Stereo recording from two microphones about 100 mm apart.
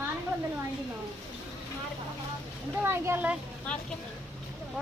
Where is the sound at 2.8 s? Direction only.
25° right (ahead or behind).